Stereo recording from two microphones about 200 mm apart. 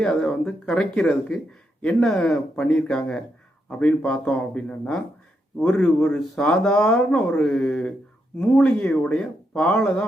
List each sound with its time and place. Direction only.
0.0 s speech: 5° left (ahead or behind)